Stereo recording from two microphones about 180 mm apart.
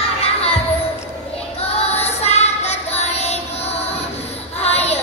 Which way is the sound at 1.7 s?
35° left (ahead or behind).